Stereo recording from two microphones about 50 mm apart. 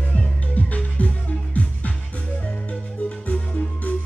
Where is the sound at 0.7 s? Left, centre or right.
Left.